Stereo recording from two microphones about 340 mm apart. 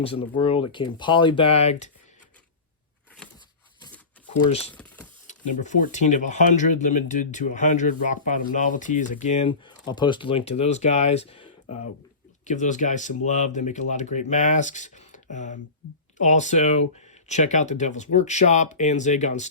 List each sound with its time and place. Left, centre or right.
0.0 s speech: centre
3.2 s a sound: centre
4.4 s speech: centre
4.7 s typing: centre
5.2 s speech: left